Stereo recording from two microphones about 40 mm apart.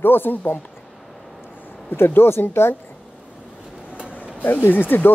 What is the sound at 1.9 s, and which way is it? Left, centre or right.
Speech, left.